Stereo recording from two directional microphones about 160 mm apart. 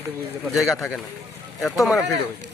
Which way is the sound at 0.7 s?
Centre (ahead or behind).